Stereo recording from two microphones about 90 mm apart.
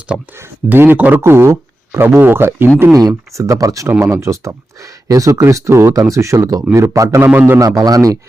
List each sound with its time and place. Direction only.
0.3 s speech: 25° right (ahead or behind)
3.0 s speech: 40° right (ahead or behind)
7.3 s speech: 20° right (ahead or behind)
7.6 s speech: 40° right (ahead or behind)